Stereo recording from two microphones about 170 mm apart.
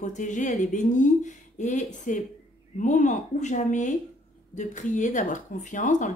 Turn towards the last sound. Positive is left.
turn(degrees=50)  # may be behind; listen again after turning